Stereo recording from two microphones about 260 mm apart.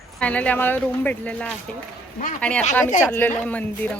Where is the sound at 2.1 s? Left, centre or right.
Left.